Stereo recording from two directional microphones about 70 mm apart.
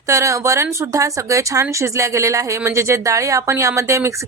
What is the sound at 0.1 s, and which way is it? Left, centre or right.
A woman's voice, right.